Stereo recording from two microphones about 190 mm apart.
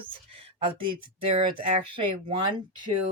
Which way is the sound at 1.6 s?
30° right (ahead or behind).